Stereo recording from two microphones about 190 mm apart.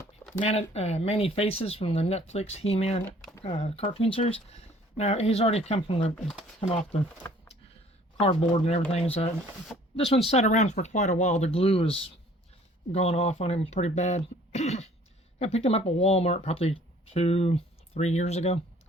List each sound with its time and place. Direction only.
0.3 s speech: 35° left (ahead or behind)
6.1 s speech: centre (ahead or behind)
6.6 s speech: 30° left (ahead or behind)
8.2 s speech: 30° left (ahead or behind)